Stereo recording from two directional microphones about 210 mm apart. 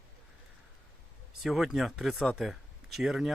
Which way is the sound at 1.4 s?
Centre (ahead or behind).